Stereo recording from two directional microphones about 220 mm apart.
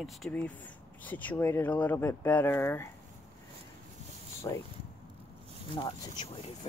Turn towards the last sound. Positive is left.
turn(degrees=20)  # may be behind; listen again after turning